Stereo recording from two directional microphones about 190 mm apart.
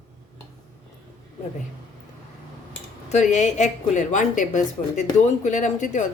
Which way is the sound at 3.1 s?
35° left (ahead or behind).